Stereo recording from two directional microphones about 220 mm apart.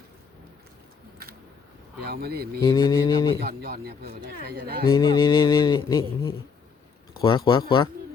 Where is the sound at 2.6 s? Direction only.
20° left (ahead or behind).